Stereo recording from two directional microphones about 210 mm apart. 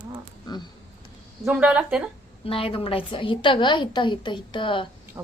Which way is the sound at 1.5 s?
5° right (ahead or behind).